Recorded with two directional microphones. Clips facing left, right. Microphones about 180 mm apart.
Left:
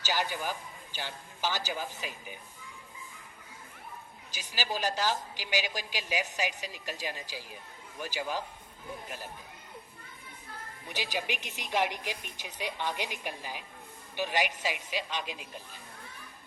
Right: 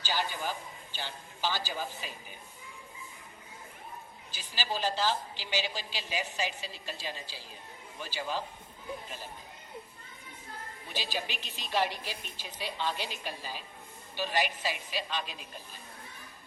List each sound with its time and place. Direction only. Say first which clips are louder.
0.2 s a woman's voice: left 1 dB; 15° left (ahead or behind)
4.4 s a woman's voice: left 1 dB; 10° left (ahead or behind)
10.8 s a woman's voice: left 2 dB; 15° left (ahead or behind)